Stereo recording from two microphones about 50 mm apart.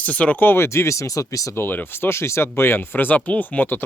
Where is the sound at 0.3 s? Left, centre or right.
Left.